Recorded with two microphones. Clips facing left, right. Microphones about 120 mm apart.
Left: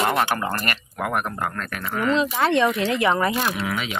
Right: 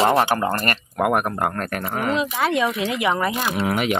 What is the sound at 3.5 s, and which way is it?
Speech, 55° right (ahead or behind).